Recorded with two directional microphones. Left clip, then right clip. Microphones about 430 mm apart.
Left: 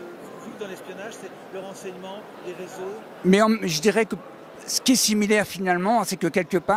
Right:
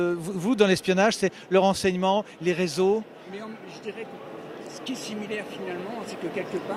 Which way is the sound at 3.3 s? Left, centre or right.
Left.